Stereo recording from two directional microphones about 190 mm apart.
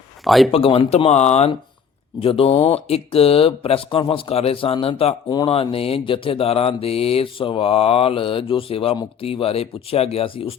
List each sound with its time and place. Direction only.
0.3 s speech: centre (ahead or behind)
0.5 s speech: 30° left (ahead or behind)